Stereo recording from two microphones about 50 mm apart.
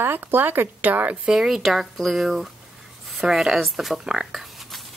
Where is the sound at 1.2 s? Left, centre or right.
Centre.